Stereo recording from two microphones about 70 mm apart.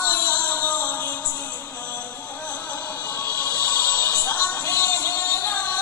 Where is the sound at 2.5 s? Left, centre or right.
Left.